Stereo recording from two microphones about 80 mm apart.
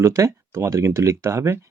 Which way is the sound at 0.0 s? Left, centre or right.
Right.